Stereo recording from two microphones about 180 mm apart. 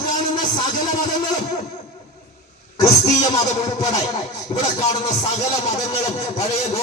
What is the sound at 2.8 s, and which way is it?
Speech, 20° left (ahead or behind).